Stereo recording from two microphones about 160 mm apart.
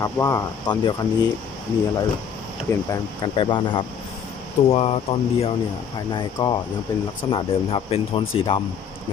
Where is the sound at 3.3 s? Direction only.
30° left (ahead or behind).